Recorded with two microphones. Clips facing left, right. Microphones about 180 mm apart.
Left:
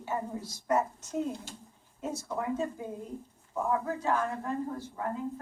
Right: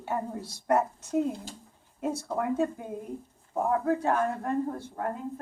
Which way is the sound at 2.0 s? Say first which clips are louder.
Right 4 dB; 60° right (ahead or behind).